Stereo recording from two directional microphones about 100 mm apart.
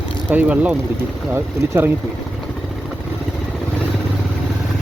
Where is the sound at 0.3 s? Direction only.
15° right (ahead or behind).